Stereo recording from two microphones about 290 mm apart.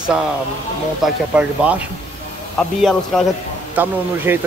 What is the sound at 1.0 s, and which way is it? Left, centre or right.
Speech, centre.